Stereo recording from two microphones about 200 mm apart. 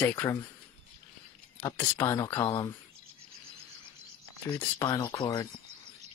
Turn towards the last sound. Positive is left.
turn(degrees=20)  # may be behind; listen again after turning